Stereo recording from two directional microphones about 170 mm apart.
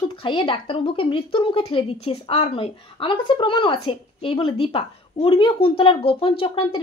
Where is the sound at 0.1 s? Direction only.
30° left (ahead or behind).